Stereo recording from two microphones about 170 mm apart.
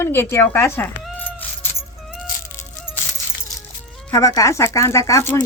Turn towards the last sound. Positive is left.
turn(degrees=15)  # may be behind; listen again after turning